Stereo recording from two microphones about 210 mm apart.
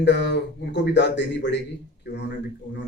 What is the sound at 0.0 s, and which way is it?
Speech, 55° left (ahead or behind).